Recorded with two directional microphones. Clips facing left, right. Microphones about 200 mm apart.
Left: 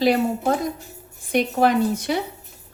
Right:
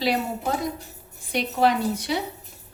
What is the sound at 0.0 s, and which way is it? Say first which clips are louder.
A woman's voice: left 6 dB; 50° left (ahead or behind).